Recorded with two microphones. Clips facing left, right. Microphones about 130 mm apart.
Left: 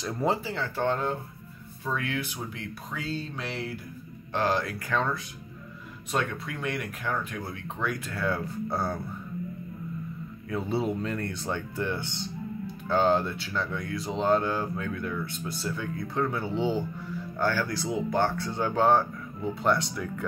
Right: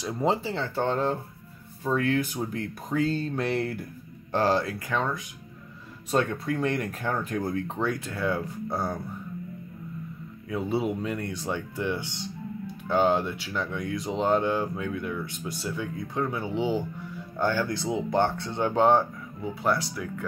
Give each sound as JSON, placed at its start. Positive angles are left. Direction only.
{"t": 0.0, "sound": "speech", "side_deg": -15}
{"t": 4.3, "sound": "speech", "side_deg": -35}
{"t": 6.1, "sound": "speech", "side_deg": -40}
{"t": 10.5, "sound": "speech", "side_deg": -10}
{"t": 19.4, "sound": "speech", "side_deg": -5}